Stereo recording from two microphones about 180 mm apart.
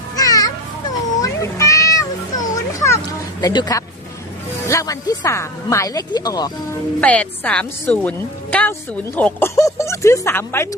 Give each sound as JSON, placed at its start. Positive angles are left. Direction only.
{"t": 0.2, "sound": "a sound", "side_deg": 20}
{"t": 3.4, "sound": "speech", "side_deg": 20}
{"t": 7.0, "sound": "a woman's voice", "side_deg": 5}